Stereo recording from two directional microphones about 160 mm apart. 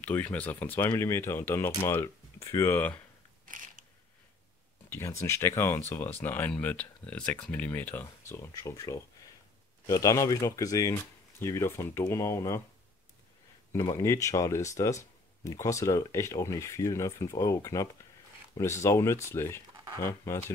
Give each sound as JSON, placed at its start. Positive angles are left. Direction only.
{"t": 0.0, "sound": "speech", "side_deg": 10}
{"t": 3.4, "sound": "gears", "side_deg": -55}
{"t": 4.8, "sound": "speech", "side_deg": 15}
{"t": 13.8, "sound": "speech", "side_deg": 20}